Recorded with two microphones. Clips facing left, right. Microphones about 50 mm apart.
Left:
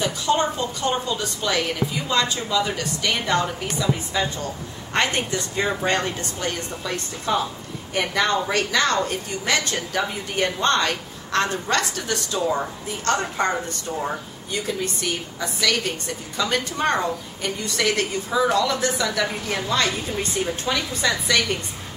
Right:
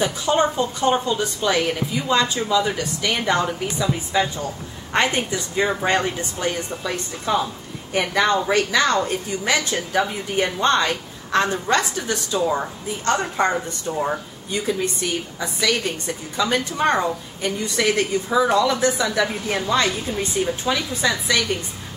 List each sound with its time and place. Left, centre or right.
0.0 s a woman's voice: centre
16.3 s a woman's voice: centre